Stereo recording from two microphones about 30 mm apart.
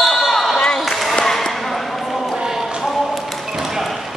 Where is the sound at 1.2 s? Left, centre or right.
Centre.